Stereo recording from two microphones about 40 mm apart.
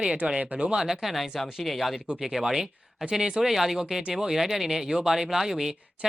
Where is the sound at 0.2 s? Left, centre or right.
Right.